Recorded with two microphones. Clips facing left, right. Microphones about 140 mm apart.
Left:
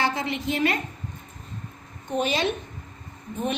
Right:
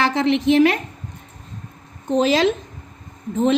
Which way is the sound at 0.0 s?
85° right.